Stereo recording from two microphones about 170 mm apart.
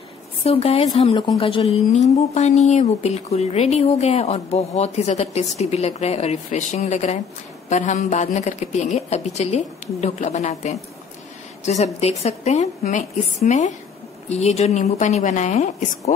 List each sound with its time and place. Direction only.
0.4 s a woman's voice: 35° left (ahead or behind)